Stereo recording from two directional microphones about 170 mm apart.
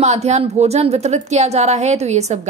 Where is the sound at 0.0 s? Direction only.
40° right (ahead or behind).